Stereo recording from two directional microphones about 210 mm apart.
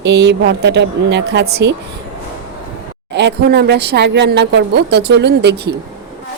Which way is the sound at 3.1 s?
55° right (ahead or behind).